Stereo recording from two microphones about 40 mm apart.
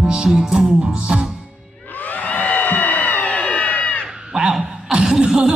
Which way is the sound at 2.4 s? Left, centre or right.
Left.